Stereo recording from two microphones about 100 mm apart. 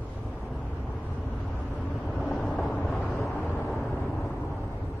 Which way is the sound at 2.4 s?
15° left (ahead or behind).